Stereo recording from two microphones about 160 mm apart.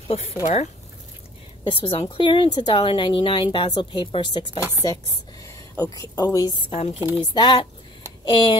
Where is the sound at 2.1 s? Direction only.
30° left (ahead or behind).